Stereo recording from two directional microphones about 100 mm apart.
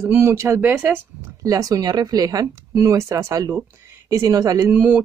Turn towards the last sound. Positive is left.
turn(degrees=-15)  # may be behind; listen again after turning